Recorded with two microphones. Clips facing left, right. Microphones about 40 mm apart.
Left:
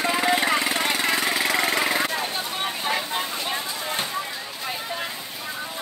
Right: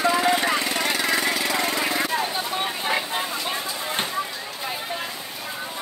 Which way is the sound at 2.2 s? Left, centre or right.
Centre.